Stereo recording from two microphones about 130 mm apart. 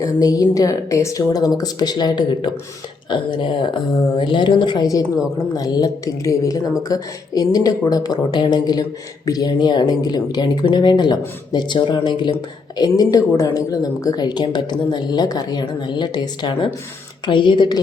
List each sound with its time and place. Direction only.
0.0 s a woman's voice: 25° left (ahead or behind)